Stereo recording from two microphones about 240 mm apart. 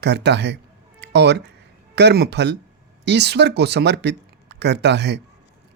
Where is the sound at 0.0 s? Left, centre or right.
Right.